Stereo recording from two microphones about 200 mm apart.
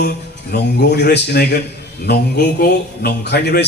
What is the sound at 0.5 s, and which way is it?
A man's voice, 55° left (ahead or behind).